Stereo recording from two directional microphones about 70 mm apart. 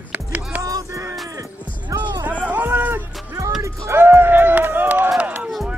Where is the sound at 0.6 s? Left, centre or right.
Right.